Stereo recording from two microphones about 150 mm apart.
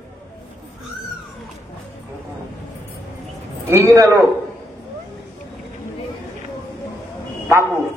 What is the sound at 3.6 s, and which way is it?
Speech, 20° right (ahead or behind).